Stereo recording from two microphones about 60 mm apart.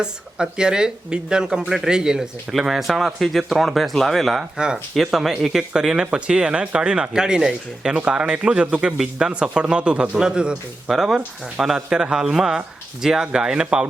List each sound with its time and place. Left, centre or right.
0.0 s a man's voice: centre